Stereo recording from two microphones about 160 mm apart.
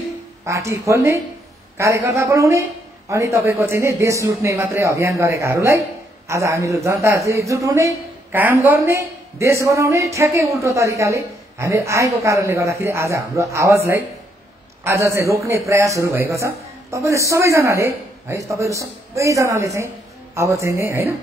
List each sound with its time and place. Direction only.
0.5 s a man's voice: 20° right (ahead or behind)